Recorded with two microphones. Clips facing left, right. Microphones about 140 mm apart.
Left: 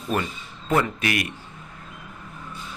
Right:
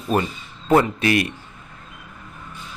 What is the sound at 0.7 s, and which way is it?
Speech, 30° right (ahead or behind).